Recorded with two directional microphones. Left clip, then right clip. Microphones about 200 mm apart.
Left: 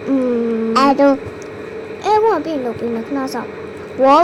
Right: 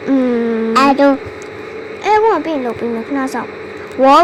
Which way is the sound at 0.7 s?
10° right (ahead or behind).